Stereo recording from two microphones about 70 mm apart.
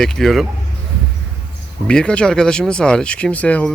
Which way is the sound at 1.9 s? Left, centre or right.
Centre.